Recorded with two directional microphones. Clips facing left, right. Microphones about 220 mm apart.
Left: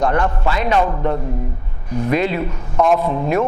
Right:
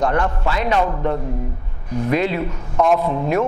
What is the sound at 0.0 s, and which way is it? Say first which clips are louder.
A man's voice: left 1 dB; 10° left (ahead or behind).